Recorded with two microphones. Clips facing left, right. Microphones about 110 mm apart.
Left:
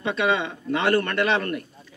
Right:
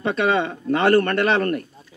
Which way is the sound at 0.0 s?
45° right (ahead or behind).